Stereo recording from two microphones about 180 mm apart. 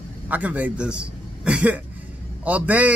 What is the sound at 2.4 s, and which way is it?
Speech, 10° right (ahead or behind).